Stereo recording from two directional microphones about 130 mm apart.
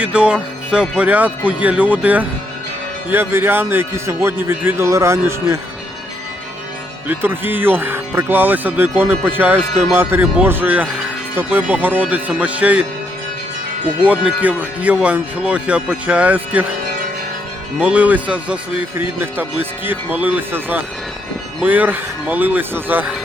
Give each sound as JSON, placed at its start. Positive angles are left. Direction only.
{"t": 0.0, "sound": "a man's voice", "side_deg": -10}
{"t": 7.1, "sound": "speech", "side_deg": -15}
{"t": 14.0, "sound": "speech", "side_deg": -10}
{"t": 17.7, "sound": "speech", "side_deg": -10}